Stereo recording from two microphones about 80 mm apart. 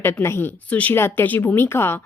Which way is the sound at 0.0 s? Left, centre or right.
Left.